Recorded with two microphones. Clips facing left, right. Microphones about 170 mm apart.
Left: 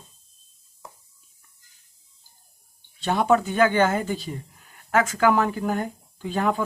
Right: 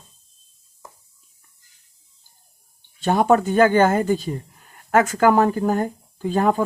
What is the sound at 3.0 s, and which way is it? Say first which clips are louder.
Speech: right 4 dB; 45° right (ahead or behind).